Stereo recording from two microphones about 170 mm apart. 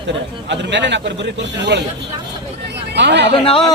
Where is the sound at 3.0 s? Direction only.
90° right.